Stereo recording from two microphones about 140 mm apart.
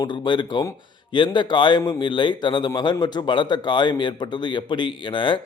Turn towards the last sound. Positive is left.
turn(degrees=35)  # may be behind; listen again after turning